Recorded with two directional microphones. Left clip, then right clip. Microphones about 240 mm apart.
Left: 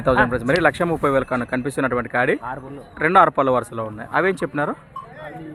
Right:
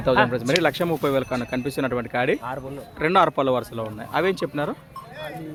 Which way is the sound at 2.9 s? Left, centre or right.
Centre.